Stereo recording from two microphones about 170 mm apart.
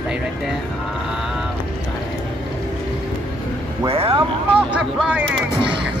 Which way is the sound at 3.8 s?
35° right (ahead or behind).